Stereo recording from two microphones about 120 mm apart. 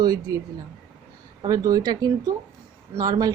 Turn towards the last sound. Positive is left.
turn(degrees=-30)  # may be behind; listen again after turning